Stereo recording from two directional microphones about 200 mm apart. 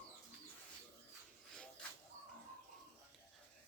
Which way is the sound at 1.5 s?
5° left (ahead or behind).